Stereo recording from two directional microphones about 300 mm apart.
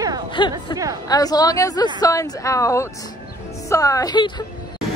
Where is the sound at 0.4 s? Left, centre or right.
Centre.